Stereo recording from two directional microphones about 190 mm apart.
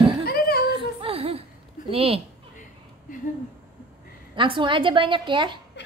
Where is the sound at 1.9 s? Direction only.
30° right (ahead or behind).